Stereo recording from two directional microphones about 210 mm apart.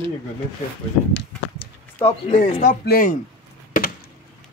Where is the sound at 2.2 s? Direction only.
25° left (ahead or behind).